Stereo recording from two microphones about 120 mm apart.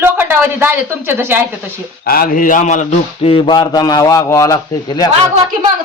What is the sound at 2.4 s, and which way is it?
Speech, 90° left.